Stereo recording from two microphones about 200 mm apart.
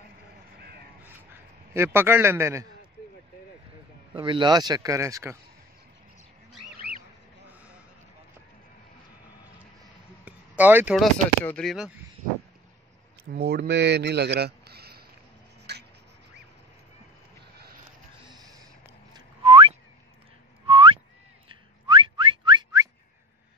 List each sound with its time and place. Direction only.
0.6 s crow: 55° right (ahead or behind)
1.7 s a man's voice: 10° right (ahead or behind)
4.1 s a man's voice: 25° right (ahead or behind)
10.2 s a sound: 5° right (ahead or behind)
11.4 s speech: 5° left (ahead or behind)
13.3 s speech: 50° right (ahead or behind)
15.7 s a sound: 55° right (ahead or behind)
18.3 s a sound: 20° right (ahead or behind)
19.1 s whistling: 25° right (ahead or behind)
21.5 s car alarm: 25° right (ahead or behind)